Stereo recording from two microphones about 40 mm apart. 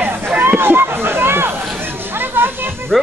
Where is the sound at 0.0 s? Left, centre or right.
Right.